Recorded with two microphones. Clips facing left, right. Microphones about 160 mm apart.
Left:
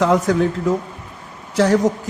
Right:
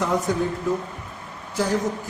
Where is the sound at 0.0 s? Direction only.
90° left.